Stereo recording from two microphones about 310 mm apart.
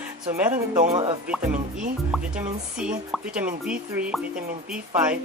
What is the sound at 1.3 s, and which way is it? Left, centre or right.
Speech, centre.